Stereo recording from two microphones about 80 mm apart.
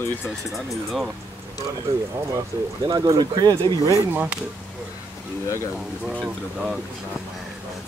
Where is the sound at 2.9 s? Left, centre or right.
Right.